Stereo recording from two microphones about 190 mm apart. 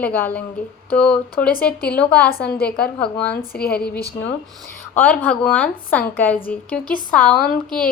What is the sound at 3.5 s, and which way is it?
Speech, 55° left (ahead or behind).